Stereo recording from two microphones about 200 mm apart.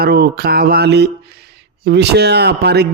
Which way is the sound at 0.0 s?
50° right (ahead or behind).